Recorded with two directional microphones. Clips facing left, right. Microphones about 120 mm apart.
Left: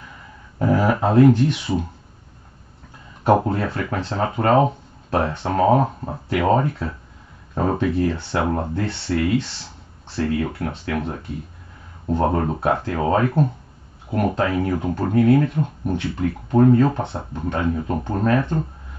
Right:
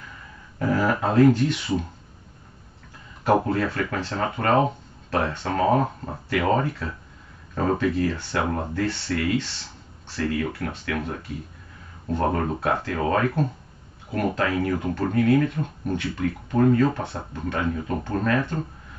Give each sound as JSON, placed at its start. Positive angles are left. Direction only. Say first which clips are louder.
{"t": 0.6, "sound": "speech", "louder": "left 4 dB", "side_deg": 20}
{"t": 3.3, "sound": "speech", "louder": "left 3 dB", "side_deg": 25}
{"t": 10.1, "sound": "speech", "louder": "left 3 dB", "side_deg": 30}